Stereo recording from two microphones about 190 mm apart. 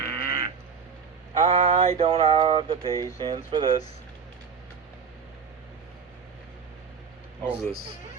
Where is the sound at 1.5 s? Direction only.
35° right (ahead or behind).